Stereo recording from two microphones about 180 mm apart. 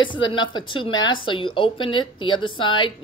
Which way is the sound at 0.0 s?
25° left (ahead or behind).